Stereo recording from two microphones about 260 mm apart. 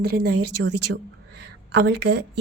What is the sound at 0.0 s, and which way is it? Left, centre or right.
A woman's voice, right.